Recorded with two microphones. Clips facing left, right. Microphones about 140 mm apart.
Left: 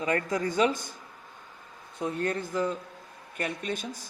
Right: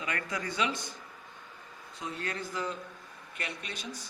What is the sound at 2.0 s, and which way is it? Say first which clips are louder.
Speech: left 8 dB; 50° left (ahead or behind).